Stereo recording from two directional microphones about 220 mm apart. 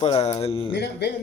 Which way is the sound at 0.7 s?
50° left (ahead or behind).